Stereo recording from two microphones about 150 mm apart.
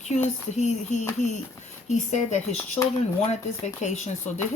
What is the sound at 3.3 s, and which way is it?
Speech, 50° left (ahead or behind).